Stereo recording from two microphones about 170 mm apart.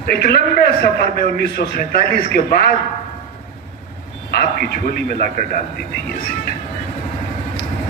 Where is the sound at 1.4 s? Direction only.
65° left (ahead or behind).